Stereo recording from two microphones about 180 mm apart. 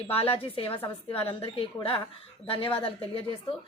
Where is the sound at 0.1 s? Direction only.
30° left (ahead or behind).